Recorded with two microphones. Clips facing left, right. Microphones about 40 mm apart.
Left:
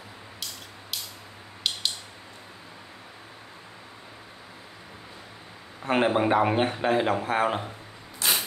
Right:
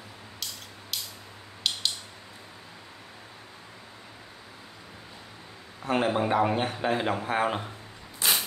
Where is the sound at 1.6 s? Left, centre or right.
Centre.